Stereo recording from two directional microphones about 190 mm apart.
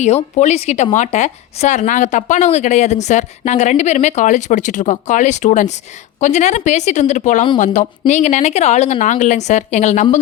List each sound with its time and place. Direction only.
0.0 s speech: 35° left (ahead or behind)